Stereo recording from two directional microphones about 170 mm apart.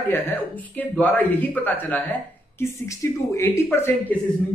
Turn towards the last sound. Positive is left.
turn(degrees=10)  # may be behind; listen again after turning